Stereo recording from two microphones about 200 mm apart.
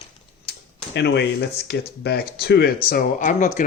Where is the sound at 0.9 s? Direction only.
60° left (ahead or behind); by 3.6 s 40° left (ahead or behind).